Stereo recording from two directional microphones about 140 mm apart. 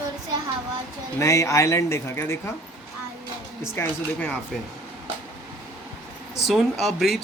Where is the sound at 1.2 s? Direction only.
20° left (ahead or behind).